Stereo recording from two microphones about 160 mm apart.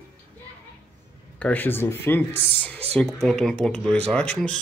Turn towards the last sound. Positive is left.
turn(degrees=5)  # may be behind; listen again after turning